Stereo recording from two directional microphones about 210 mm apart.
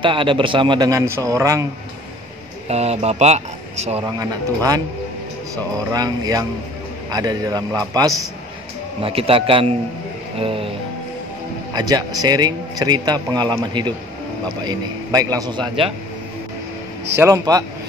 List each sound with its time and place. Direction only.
0.0 s a man's voice: 25° right (ahead or behind)
2.7 s speech: 30° right (ahead or behind)
4.0 s a man's voice: 15° right (ahead or behind)
5.9 s a man's voice: 20° right (ahead or behind)
11.7 s a man's voice: 20° right (ahead or behind)
17.2 s a man's voice: 15° right (ahead or behind)